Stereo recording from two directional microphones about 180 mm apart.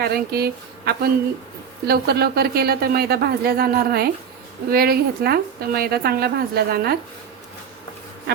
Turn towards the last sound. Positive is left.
turn(degrees=-60)  # may be behind; listen again after turning